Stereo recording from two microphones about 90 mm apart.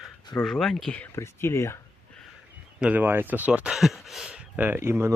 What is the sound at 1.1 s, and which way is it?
Speech, 30° left (ahead or behind).